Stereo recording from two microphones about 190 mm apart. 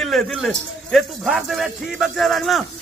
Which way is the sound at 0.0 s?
Centre (ahead or behind).